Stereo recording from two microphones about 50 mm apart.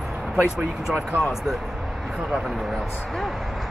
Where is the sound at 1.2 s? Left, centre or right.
Centre.